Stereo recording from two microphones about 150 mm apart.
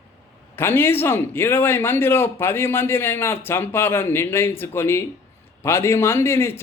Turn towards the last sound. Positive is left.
turn(degrees=15)  # may be behind; listen again after turning